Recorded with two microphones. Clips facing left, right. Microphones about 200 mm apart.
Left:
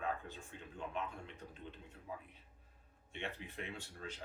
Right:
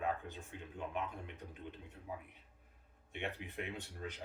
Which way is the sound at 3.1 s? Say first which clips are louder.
Right 2 dB; 15° right (ahead or behind).